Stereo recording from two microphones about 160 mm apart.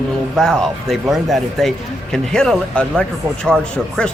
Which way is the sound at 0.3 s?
Centre (ahead or behind).